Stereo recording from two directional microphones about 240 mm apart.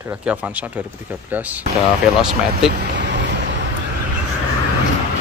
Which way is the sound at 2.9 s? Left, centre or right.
Right.